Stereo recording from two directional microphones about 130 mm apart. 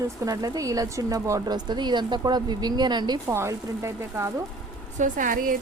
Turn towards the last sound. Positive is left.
turn(degrees=-90)